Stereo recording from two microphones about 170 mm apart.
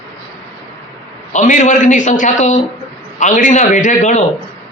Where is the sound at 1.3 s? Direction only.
45° left (ahead or behind).